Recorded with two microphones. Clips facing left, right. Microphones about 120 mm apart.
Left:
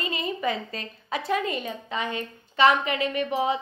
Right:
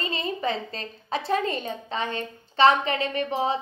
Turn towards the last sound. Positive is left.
turn(degrees=-35)  # may be behind; listen again after turning